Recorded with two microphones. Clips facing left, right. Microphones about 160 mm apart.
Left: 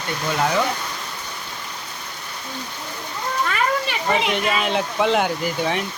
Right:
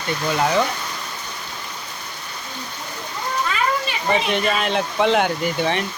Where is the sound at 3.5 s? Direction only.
65° left (ahead or behind).